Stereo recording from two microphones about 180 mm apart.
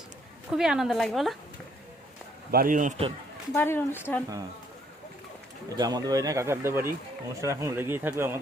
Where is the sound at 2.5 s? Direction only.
50° right (ahead or behind).